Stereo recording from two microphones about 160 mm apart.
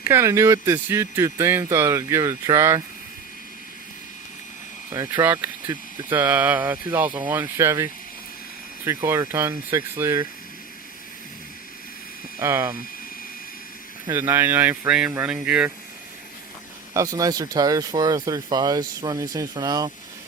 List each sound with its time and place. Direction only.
0.0 s speech: 15° right (ahead or behind)
4.9 s speech: 15° right (ahead or behind)
9.0 s speech: 15° right (ahead or behind)
12.4 s speech: 20° right (ahead or behind)
14.1 s speech: 15° right (ahead or behind)
16.9 s speech: 20° right (ahead or behind)